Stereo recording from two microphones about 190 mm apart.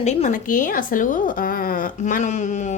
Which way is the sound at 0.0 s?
35° left (ahead or behind).